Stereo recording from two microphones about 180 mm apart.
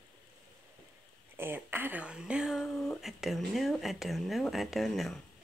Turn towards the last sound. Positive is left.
turn(degrees=0)  # may be behind; listen again after turning